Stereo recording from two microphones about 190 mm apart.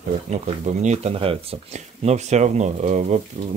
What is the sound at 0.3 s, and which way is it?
Speech, 35° right (ahead or behind).